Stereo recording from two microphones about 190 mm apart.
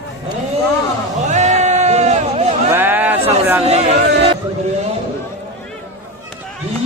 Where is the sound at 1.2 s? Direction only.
40° right (ahead or behind).